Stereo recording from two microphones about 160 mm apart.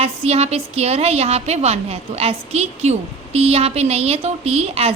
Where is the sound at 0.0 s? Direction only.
40° right (ahead or behind).